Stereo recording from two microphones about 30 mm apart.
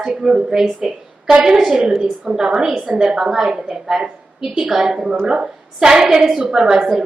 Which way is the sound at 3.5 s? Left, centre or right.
Right.